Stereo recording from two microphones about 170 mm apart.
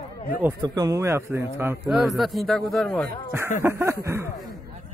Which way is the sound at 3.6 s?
15° right (ahead or behind).